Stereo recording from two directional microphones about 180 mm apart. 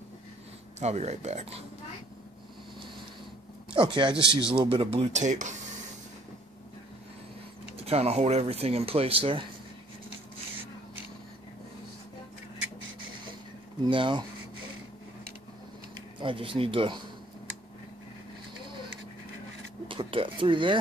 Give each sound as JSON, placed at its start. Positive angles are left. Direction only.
{"t": 0.7, "sound": "speech", "side_deg": -40}
{"t": 3.7, "sound": "speech", "side_deg": -25}
{"t": 7.7, "sound": "speech", "side_deg": -35}
{"t": 13.8, "sound": "speech", "side_deg": -25}
{"t": 16.2, "sound": "speech", "side_deg": -30}
{"t": 19.9, "sound": "speech", "side_deg": -30}